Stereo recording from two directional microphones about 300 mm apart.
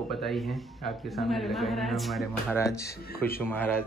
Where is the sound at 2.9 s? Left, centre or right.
Left.